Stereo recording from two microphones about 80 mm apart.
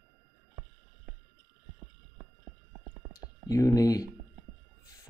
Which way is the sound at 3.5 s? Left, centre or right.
Left.